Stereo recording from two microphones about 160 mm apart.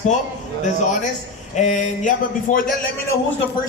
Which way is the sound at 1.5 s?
50° left (ahead or behind).